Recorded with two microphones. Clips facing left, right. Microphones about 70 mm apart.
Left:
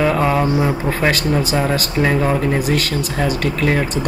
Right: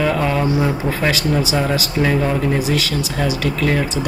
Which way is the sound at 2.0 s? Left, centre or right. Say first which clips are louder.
Left 1 dB; centre.